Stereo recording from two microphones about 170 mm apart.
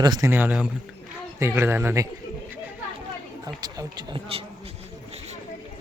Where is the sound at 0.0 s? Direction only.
20° right (ahead or behind).